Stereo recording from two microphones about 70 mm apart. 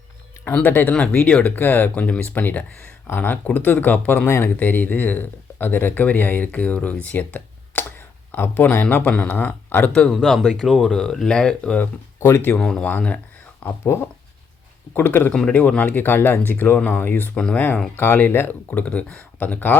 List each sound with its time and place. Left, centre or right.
0.6 s speech: left
10.1 s speech: centre
12.2 s speech: left
12.5 s speech: centre
13.8 s speech: left
15.3 s speech: centre; by 17.3 s left
17.3 s speech: centre
17.9 s speech: left